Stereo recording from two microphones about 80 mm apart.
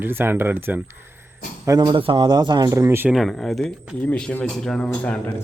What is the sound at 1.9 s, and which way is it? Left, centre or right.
Speech, right.